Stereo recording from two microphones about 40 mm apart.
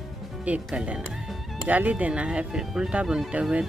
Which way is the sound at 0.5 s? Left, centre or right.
Right.